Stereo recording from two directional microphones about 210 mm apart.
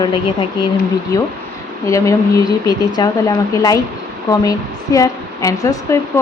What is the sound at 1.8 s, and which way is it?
A woman's voice, 15° left (ahead or behind).